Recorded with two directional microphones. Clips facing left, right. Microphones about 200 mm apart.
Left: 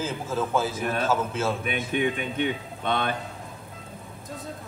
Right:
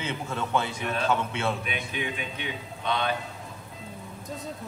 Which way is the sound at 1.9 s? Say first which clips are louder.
Left 7 dB; 50° left (ahead or behind).